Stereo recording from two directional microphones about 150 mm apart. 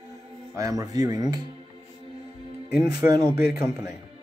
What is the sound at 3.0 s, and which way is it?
Speech, 20° right (ahead or behind).